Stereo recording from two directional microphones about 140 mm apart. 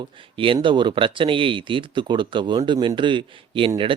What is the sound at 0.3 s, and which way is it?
Speech, 35° right (ahead or behind).